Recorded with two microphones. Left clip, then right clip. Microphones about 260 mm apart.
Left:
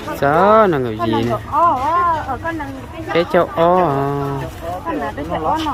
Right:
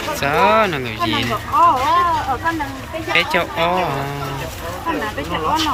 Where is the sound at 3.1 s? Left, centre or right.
Left.